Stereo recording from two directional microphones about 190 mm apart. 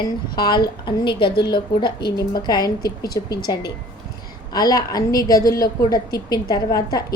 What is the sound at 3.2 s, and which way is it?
A woman's voice, 20° left (ahead or behind).